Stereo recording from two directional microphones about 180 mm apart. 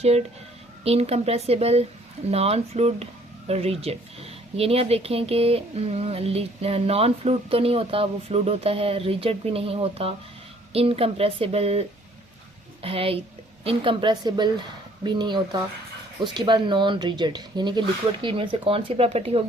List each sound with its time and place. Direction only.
0.0 s speech: 35° right (ahead or behind)